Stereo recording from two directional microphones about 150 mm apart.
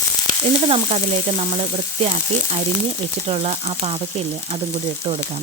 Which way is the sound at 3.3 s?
45° right (ahead or behind).